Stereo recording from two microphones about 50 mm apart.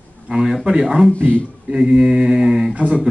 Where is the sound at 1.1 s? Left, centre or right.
Left.